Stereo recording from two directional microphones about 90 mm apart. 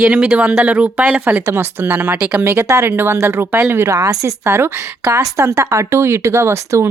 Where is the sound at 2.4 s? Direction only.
30° right (ahead or behind).